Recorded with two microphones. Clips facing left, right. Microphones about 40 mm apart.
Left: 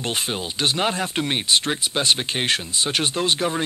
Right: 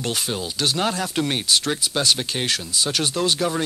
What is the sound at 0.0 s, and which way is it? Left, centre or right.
Speech, left.